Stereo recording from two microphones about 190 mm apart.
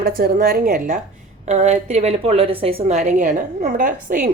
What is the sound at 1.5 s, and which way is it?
A woman's voice, 35° right (ahead or behind).